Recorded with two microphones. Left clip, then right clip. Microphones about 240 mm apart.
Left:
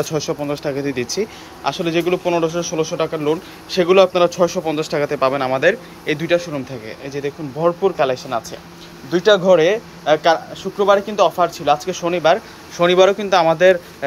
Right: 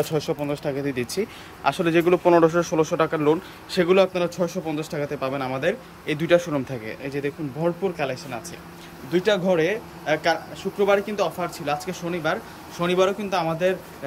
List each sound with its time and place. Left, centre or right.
0.0 s a man's voice: centre